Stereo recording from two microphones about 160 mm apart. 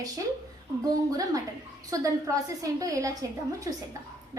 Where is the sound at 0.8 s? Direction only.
25° right (ahead or behind).